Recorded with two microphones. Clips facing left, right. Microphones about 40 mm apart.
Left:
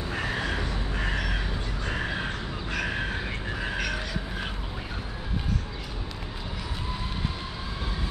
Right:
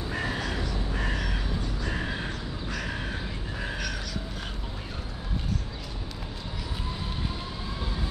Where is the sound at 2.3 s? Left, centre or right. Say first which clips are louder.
Left 3 dB; left.